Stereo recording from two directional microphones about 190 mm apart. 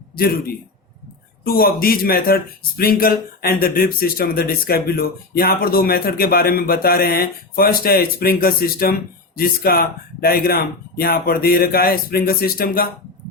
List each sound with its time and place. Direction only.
0.2 s speech: 50° left (ahead or behind)